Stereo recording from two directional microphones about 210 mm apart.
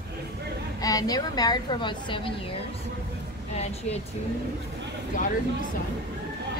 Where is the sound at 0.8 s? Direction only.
15° left (ahead or behind).